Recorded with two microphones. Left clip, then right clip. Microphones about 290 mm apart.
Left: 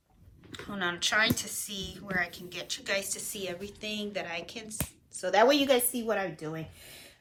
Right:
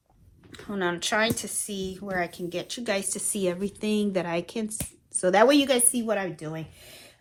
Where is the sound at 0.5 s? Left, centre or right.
Centre.